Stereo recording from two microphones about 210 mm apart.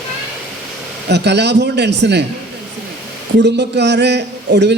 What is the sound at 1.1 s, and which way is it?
A man's voice, 55° right (ahead or behind).